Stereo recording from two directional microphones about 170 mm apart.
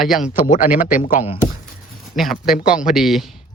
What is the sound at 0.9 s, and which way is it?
Speech, 50° left (ahead or behind).